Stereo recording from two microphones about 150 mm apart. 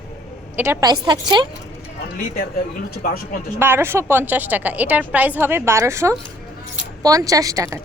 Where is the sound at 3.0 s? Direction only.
80° left.